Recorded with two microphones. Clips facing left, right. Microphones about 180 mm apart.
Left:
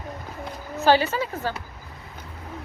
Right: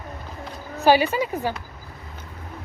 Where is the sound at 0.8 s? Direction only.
15° right (ahead or behind).